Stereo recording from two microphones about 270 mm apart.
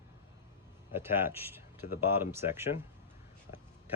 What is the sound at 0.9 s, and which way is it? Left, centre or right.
Speech, centre.